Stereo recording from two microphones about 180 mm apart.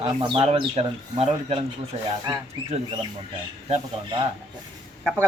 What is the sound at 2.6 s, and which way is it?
Speech, 35° right (ahead or behind).